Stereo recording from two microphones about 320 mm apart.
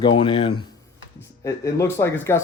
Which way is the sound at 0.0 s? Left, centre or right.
Centre.